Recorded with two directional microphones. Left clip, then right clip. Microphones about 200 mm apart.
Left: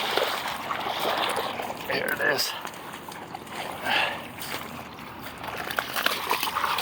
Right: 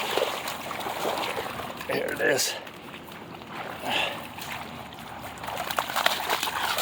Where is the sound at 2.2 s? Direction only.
45° right (ahead or behind).